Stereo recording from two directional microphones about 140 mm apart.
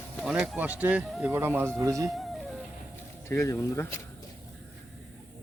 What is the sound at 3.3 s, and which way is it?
Speech, 20° left (ahead or behind).